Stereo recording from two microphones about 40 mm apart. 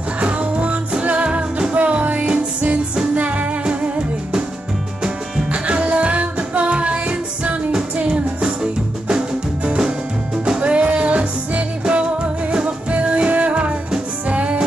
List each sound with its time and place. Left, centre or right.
0.2 s music: right
5.5 s music: right
10.6 s music: right